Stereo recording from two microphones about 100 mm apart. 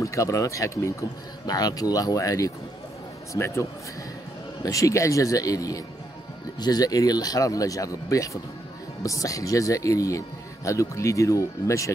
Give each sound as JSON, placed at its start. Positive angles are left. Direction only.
{"t": 0.0, "sound": "speech", "side_deg": 30}
{"t": 4.6, "sound": "speech", "side_deg": 35}